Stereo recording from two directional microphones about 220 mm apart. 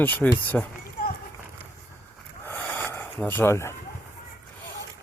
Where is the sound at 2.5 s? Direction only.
10° left (ahead or behind).